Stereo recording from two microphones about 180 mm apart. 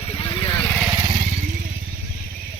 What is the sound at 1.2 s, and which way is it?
Motorcycle, 45° right (ahead or behind).